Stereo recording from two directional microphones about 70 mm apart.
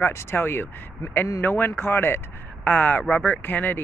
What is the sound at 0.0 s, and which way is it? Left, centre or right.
Speech, left.